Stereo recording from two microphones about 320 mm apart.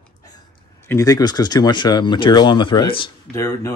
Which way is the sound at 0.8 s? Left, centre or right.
Centre.